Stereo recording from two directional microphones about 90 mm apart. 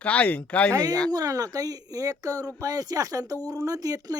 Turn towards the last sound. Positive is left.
turn(degrees=-45)  # may be behind; listen again after turning